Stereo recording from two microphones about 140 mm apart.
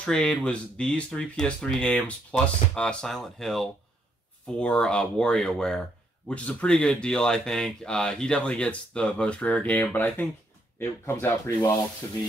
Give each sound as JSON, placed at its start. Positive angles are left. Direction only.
{"t": 0.0, "sound": "speech", "side_deg": 5}